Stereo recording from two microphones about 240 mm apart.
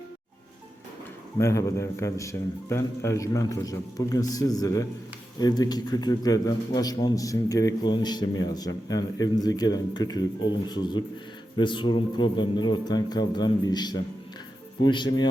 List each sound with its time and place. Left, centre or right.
1.4 s a man's voice: centre